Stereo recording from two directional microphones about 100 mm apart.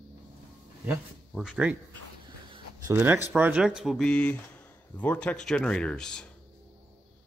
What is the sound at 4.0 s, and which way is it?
Speech, 10° left (ahead or behind).